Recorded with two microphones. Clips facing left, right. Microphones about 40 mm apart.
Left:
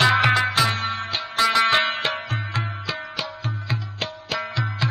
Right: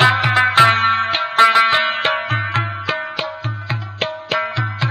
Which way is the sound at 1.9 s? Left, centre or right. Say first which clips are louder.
Right 7 dB; right.